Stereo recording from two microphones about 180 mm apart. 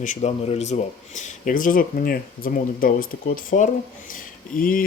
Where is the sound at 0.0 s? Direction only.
40° left (ahead or behind).